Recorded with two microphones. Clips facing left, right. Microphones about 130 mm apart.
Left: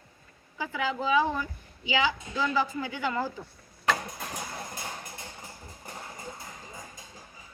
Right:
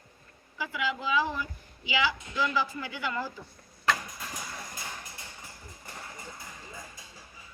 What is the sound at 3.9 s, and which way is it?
Vehicle, 30° left (ahead or behind).